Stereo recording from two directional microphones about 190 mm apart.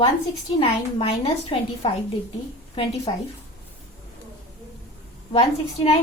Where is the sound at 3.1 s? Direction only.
30° left (ahead or behind).